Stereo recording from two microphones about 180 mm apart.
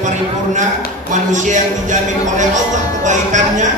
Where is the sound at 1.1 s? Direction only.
45° right (ahead or behind).